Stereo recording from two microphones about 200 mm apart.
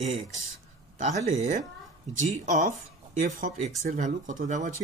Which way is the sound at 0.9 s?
35° right (ahead or behind).